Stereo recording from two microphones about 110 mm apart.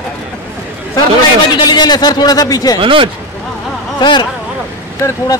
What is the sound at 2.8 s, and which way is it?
Speech, 55° right (ahead or behind).